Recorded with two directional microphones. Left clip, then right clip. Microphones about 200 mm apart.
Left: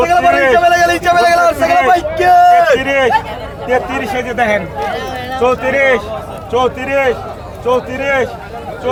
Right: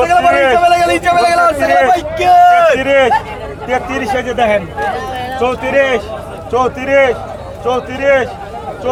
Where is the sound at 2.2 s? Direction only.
10° left (ahead or behind).